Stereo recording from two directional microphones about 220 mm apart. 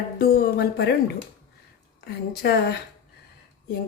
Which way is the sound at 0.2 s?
45° left (ahead or behind).